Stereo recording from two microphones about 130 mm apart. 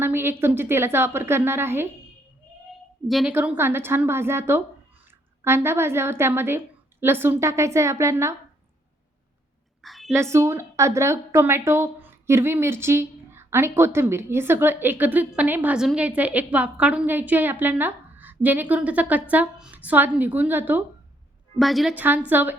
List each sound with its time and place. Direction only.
0.0 s a woman's voice: 15° right (ahead or behind)
3.1 s a woman's voice: centre (ahead or behind)
3.3 s a woman's voice: 15° right (ahead or behind)
9.8 s a sound: centre (ahead or behind)
10.1 s a woman's voice: 20° right (ahead or behind)
21.6 s a woman's voice: centre (ahead or behind)
21.9 s a woman's voice: 15° right (ahead or behind)